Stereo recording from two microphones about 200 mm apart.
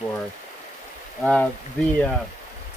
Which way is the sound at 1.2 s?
5° left (ahead or behind).